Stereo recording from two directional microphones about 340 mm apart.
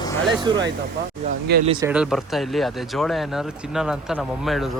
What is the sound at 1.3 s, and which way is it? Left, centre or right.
Speech, right.